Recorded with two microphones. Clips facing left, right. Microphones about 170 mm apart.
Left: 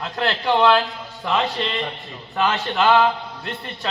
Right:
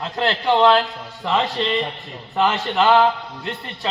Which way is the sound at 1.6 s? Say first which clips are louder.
Right 4 dB; 20° right (ahead or behind).